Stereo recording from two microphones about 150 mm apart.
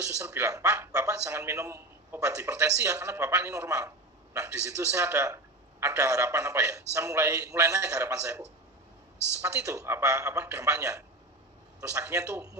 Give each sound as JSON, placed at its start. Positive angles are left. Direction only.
{"t": 0.2, "sound": "a man's voice", "side_deg": -20}